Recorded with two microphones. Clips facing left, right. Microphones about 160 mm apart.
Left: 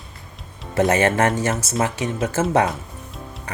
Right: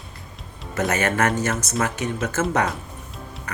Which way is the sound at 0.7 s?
30° left (ahead or behind).